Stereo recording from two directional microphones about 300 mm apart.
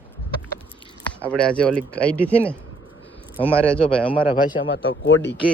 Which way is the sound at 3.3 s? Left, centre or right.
Centre.